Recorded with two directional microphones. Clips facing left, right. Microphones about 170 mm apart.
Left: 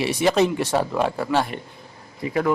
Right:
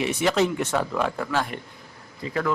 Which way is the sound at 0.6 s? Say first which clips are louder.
Left 3 dB; 35° left (ahead or behind).